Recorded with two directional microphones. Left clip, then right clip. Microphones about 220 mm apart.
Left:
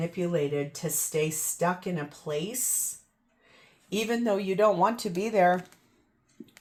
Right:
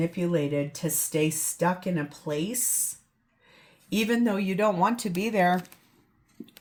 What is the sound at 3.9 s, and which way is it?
Speech, 20° left (ahead or behind).